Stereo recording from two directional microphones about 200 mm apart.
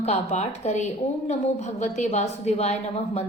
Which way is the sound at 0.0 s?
35° left (ahead or behind).